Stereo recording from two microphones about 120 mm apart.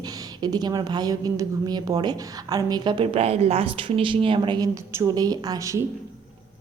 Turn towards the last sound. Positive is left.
turn(degrees=-25)  # may be behind; listen again after turning